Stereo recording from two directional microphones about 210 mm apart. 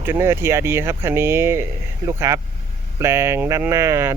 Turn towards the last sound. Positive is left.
turn(degrees=-15)  # may be behind; listen again after turning